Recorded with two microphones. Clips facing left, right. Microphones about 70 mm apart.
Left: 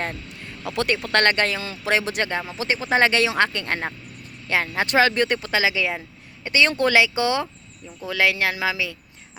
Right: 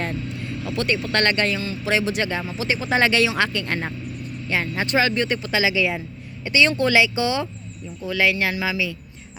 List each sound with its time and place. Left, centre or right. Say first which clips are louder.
0.7 s speech: left 1 dB; left
0.9 s speech: left 2 dB; left
1.8 s speech: even; left
2.6 s speech: left 1 dB; left
4.4 s speech: left 2 dB; left
8.0 s speech: even; left